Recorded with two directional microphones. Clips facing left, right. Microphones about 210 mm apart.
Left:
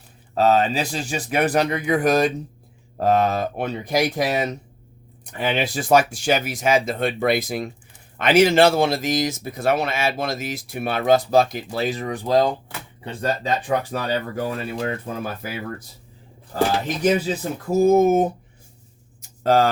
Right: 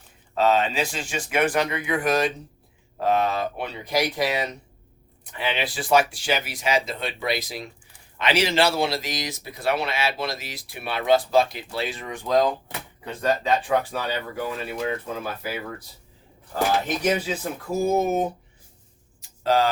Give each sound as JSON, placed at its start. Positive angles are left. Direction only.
{"t": 0.3, "sound": "speech", "side_deg": 40}
{"t": 17.0, "sound": "speech", "side_deg": 35}
{"t": 19.4, "sound": "speech", "side_deg": 50}